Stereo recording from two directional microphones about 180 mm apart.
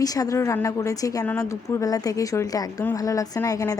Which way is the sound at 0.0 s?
20° left (ahead or behind).